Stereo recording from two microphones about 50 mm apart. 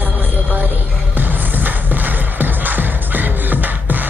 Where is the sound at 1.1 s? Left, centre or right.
Right.